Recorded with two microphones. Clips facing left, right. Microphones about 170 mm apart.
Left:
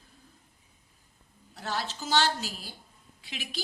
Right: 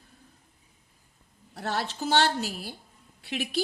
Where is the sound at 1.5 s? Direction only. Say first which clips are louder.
Right 3 dB; 60° right (ahead or behind).